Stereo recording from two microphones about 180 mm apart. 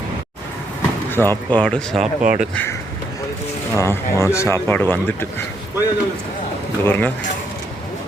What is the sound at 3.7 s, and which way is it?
Speech, 15° left (ahead or behind).